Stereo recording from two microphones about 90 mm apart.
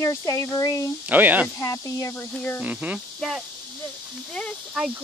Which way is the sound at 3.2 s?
Centre (ahead or behind).